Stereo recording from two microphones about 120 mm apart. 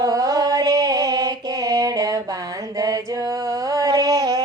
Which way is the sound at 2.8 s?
30° right (ahead or behind).